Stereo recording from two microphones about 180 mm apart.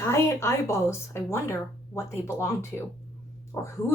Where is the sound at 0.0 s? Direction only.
15° left (ahead or behind).